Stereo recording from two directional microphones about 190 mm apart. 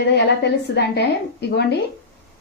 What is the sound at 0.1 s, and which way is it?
A woman's voice, 60° left (ahead or behind).